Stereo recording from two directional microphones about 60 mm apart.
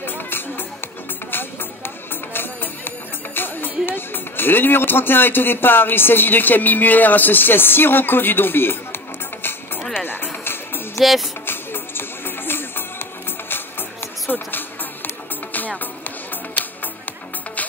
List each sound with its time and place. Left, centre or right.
0.0 s music: left
2.3 s music: left
3.3 s speech: left
10.0 s music: left
11.0 s speech: centre
11.4 s music: left
14.3 s speech: left